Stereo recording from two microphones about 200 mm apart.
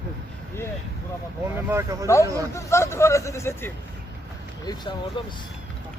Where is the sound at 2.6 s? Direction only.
15° left (ahead or behind).